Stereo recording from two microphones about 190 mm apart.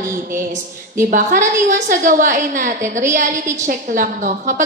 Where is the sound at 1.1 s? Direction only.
45° right (ahead or behind).